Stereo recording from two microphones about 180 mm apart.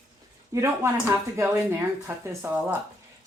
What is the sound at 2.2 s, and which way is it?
Speech, 15° right (ahead or behind).